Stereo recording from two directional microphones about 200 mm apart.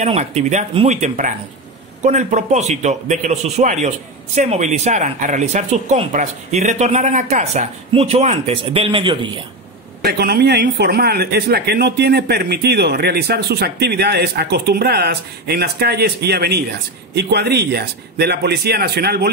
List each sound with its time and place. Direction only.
0.0 s speech: 35° right (ahead or behind)
10.0 s a man's voice: 50° right (ahead or behind)